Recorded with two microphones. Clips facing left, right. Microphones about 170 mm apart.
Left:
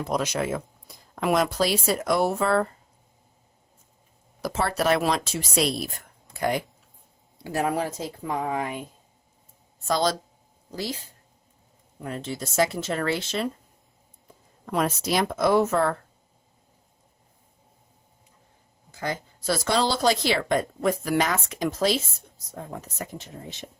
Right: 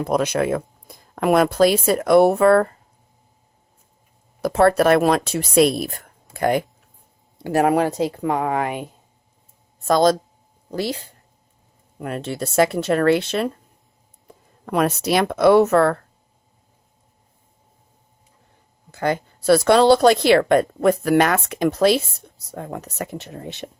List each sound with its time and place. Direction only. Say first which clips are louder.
0.0 s a woman's voice: right 6 dB; 60° right (ahead or behind)
4.4 s a woman's voice: right 10 dB; 55° right (ahead or behind)
7.4 s speech: right 8 dB; 65° right (ahead or behind)
9.8 s speech: right 8 dB; 50° right (ahead or behind)
10.7 s a woman's voice: right 7 dB; 65° right (ahead or behind)
14.7 s speech: right 6 dB; 65° right (ahead or behind)
18.9 s a woman's voice: right 9 dB; 65° right (ahead or behind)